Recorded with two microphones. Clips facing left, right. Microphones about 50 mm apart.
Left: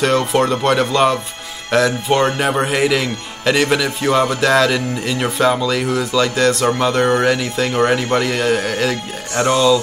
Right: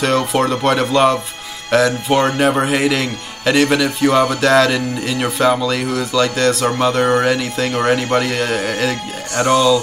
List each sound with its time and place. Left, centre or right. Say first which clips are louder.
0.0 s speech: left 1 dB; centre